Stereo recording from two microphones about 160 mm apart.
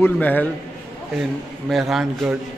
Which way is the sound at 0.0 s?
10° left (ahead or behind).